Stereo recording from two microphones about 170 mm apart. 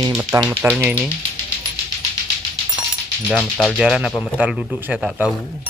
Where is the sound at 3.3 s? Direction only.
5° left (ahead or behind).